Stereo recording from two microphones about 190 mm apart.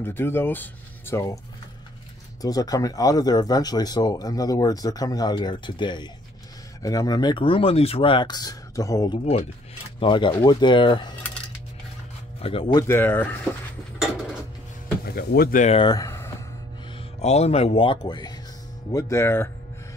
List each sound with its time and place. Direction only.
0.0 s speech: 10° left (ahead or behind)
2.4 s speech: 20° left (ahead or behind)
12.4 s speech: 30° left (ahead or behind)
12.8 s speech: 10° left (ahead or behind)
15.0 s speech: 55° left (ahead or behind)
15.7 s a sound: 20° left (ahead or behind)
17.2 s speech: 35° left (ahead or behind); by 19.5 s 15° left (ahead or behind)